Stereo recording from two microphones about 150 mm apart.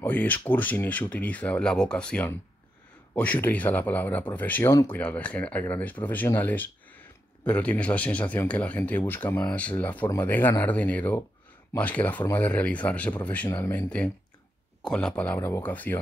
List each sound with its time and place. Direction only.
0.0 s speech: 10° left (ahead or behind)